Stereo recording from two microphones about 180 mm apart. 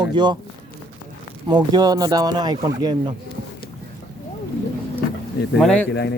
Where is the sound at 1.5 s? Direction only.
25° right (ahead or behind).